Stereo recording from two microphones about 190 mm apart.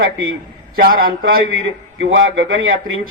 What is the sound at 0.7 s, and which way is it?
Speech, 50° right (ahead or behind).